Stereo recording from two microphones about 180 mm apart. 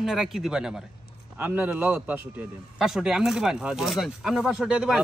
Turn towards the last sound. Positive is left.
turn(degrees=-5)  # may be behind; listen again after turning